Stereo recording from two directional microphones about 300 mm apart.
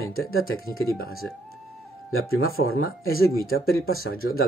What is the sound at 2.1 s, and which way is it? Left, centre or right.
Speech, left.